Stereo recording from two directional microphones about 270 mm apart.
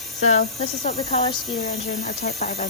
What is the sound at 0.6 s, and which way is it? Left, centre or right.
Speech, left.